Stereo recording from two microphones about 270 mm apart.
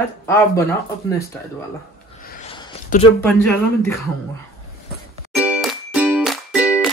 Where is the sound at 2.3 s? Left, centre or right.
Left.